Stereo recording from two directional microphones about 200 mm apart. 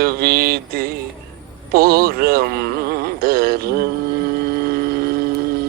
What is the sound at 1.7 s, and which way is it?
Music, 50° right (ahead or behind).